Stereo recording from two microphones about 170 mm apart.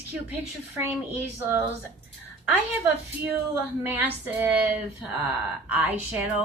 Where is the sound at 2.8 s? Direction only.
10° right (ahead or behind).